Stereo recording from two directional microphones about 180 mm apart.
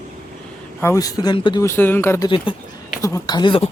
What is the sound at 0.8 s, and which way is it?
Speech, 15° left (ahead or behind).